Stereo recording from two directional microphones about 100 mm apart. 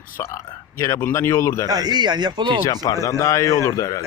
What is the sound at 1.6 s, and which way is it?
Speech, 40° right (ahead or behind).